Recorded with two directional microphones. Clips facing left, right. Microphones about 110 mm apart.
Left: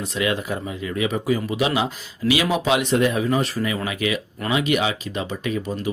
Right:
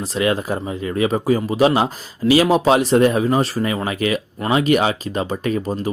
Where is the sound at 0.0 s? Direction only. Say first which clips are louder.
Right 4 dB; 35° right (ahead or behind).